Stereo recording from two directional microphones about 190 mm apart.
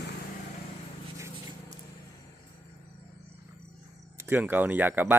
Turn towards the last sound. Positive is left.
turn(degrees=-10)  # may be behind; listen again after turning